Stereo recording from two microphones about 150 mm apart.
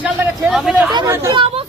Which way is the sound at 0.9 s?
20° right (ahead or behind).